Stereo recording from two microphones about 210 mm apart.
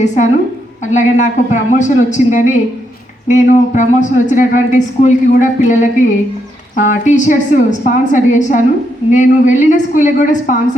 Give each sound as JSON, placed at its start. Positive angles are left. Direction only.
{"t": 0.9, "sound": "speech", "side_deg": 35}